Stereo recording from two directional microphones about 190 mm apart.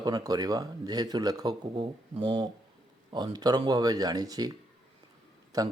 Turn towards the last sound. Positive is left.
turn(degrees=-20)  # may be behind; listen again after turning